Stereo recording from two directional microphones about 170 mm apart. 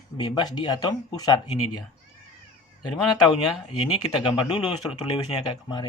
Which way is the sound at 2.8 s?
25° left (ahead or behind).